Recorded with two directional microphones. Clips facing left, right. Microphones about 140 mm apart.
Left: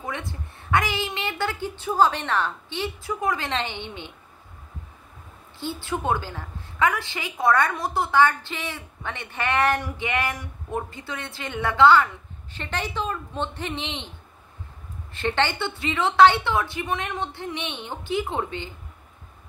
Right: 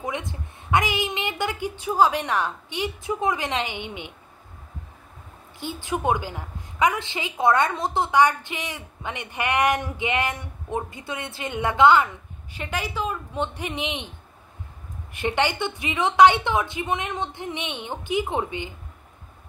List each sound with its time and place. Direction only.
0.0 s a woman's voice: 20° right (ahead or behind)
5.6 s a woman's voice: 15° right (ahead or behind)
15.1 s a woman's voice: 15° right (ahead or behind)